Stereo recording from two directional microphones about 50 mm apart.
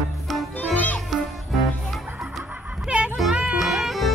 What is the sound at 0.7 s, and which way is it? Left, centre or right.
Music, left.